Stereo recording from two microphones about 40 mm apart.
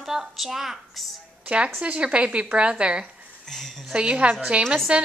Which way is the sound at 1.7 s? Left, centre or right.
Right.